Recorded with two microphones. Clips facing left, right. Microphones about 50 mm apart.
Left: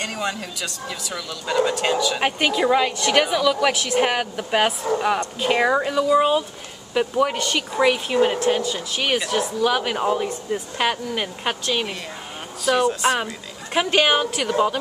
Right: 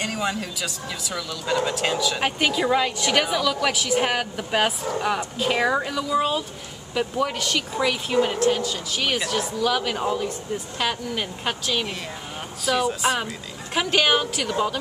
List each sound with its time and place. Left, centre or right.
0.0 s a woman's voice: centre
13.7 s a woman's voice: centre